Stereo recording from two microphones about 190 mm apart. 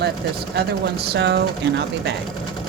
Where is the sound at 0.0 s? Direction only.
55° right (ahead or behind).